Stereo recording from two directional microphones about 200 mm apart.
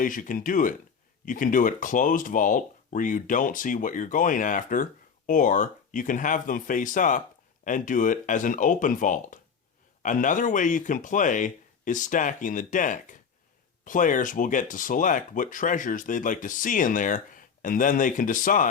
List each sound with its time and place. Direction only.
0.0 s speech: 40° left (ahead or behind)